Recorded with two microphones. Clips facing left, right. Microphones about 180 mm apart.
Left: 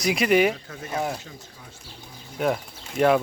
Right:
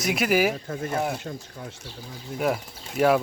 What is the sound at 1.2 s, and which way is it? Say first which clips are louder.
Speech: right 8 dB; 60° right (ahead or behind).